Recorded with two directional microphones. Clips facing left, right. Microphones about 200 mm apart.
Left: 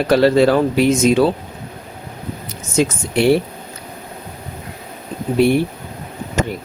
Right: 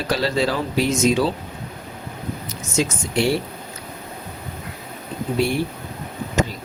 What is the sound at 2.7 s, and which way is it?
Speech, 60° left (ahead or behind).